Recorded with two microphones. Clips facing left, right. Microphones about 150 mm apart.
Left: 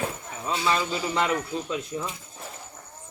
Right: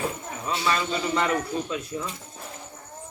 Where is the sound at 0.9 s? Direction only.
15° left (ahead or behind).